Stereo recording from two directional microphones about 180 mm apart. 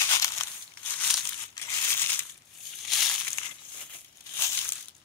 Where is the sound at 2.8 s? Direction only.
Centre (ahead or behind).